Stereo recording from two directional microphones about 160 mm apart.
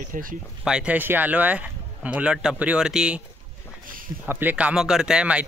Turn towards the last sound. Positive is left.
turn(degrees=-5)  # may be behind; listen again after turning